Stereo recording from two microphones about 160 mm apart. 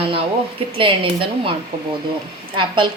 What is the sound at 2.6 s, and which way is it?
Speech, 30° right (ahead or behind).